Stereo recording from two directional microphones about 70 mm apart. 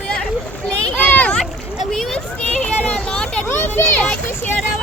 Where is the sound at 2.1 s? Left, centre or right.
Centre.